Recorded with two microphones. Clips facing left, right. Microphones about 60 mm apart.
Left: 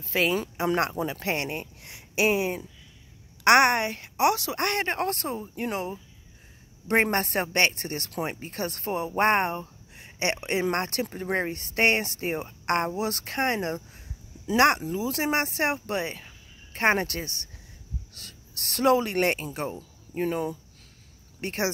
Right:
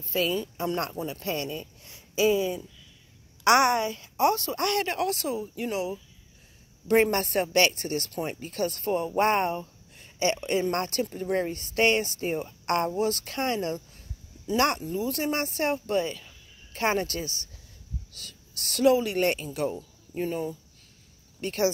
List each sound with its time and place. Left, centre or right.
0.2 s a woman's voice: left
4.6 s speech: left
8.3 s speech: left
8.5 s a woman's voice: left
13.0 s speech: left
13.9 s speech: left
19.4 s speech: left
20.2 s a woman's voice: left